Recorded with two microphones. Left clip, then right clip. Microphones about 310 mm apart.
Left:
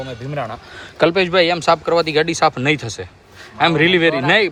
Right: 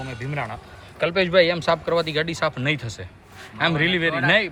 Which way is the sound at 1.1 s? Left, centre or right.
Centre.